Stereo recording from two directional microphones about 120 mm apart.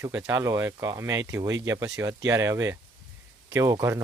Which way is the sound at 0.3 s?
25° right (ahead or behind).